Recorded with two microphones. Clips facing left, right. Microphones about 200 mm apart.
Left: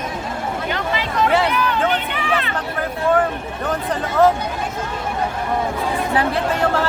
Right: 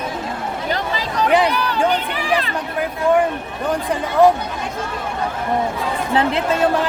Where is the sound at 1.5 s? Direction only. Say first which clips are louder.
Right 1 dB; 35° right (ahead or behind).